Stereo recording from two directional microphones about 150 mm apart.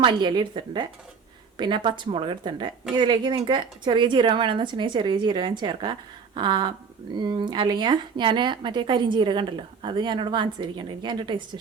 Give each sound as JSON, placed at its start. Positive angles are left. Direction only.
{"t": 0.0, "sound": "speech", "side_deg": -30}